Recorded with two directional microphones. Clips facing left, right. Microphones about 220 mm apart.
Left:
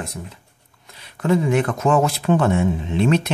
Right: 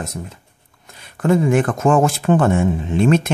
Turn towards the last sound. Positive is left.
turn(degrees=-50)  # may be behind; listen again after turning